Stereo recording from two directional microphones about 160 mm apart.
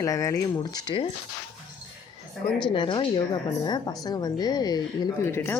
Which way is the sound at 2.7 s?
30° left (ahead or behind).